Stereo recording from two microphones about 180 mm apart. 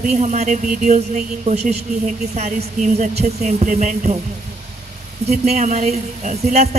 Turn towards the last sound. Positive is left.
turn(degrees=-40)  # may be behind; listen again after turning